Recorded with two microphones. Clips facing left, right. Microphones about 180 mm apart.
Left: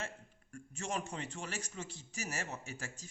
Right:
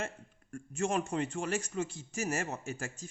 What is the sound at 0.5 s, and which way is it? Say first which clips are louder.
A man's voice: right 8 dB; 50° right (ahead or behind).